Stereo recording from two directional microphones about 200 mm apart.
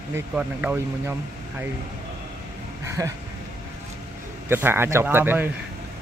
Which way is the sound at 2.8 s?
15° right (ahead or behind).